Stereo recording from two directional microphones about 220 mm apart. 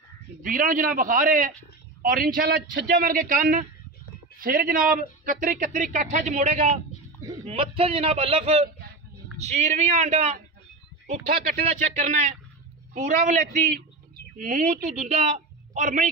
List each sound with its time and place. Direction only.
0.4 s a man's voice: 40° right (ahead or behind)
11.5 s a man's voice: 35° right (ahead or behind)